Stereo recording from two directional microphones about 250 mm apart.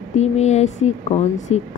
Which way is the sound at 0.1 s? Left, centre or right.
Left.